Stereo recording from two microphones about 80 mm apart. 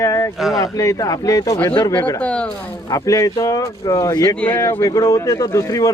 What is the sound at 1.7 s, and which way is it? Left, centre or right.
Speech, left.